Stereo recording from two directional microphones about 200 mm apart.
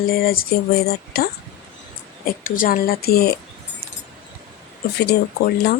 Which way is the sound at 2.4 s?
45° left (ahead or behind).